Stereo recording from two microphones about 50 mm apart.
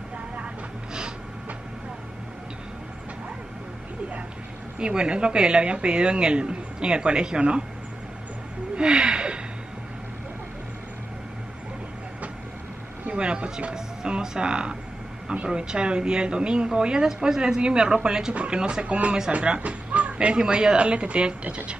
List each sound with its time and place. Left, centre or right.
4.7 s speech: centre
8.7 s gasp: centre
13.0 s speech: right